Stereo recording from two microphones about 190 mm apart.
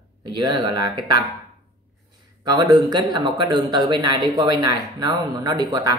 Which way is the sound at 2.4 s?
20° right (ahead or behind).